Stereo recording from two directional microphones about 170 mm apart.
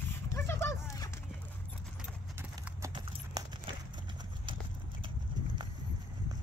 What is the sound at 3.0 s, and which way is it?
Clip-clop, 30° right (ahead or behind).